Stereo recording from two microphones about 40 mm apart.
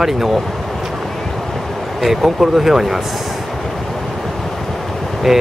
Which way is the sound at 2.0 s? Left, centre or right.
Centre.